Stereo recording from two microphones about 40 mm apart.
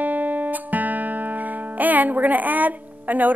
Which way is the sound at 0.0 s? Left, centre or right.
Right.